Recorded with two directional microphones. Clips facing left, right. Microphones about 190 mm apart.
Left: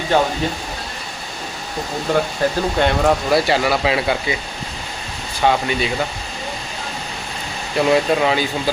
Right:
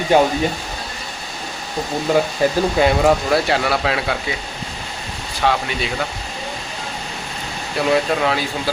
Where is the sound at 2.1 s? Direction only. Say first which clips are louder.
Right 2 dB; 5° right (ahead or behind).